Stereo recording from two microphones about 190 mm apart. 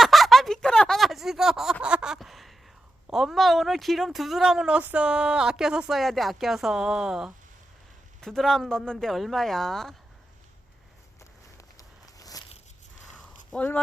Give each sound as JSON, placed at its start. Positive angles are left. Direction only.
{"t": 0.0, "sound": "a sound", "side_deg": 0}
{"t": 3.1, "sound": "speech", "side_deg": 0}
{"t": 11.8, "sound": "walk", "side_deg": 20}
{"t": 13.5, "sound": "speech", "side_deg": 10}